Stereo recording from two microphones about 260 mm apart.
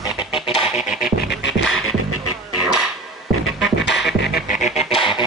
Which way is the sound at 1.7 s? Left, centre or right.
Left.